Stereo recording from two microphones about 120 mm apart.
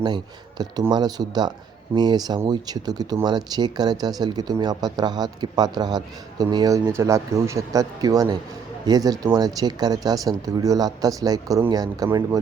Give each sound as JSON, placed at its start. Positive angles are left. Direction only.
{"t": 0.6, "sound": "speech", "side_deg": -35}